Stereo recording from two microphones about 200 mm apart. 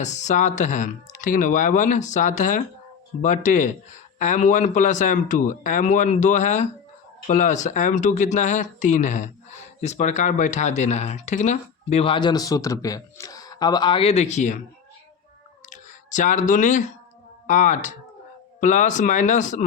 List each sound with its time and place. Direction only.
0.0 s speech: 35° left (ahead or behind)
15.7 s speech: 40° left (ahead or behind)